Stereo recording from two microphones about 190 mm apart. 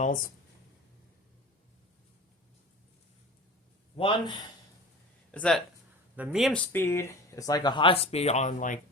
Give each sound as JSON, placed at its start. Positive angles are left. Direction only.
{"t": 0.0, "sound": "speech", "side_deg": 45}
{"t": 3.9, "sound": "speech", "side_deg": 25}
{"t": 5.3, "sound": "speech", "side_deg": 5}
{"t": 6.1, "sound": "speech", "side_deg": -5}
{"t": 6.7, "sound": "speech", "side_deg": 15}